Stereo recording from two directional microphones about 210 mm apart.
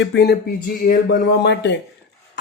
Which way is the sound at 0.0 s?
55° left (ahead or behind).